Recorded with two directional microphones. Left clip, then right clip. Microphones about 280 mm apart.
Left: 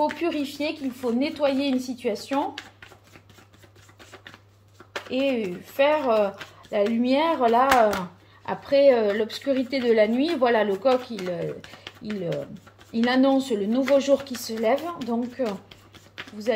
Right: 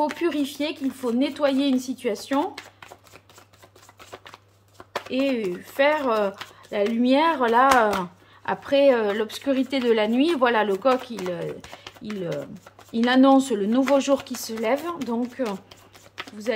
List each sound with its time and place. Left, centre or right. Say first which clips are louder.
0.0 s a woman's voice: right 1 dB; centre
5.2 s speech: even; right
5.8 s a woman's voice: left 1 dB; centre
15.3 s a sound: even; centre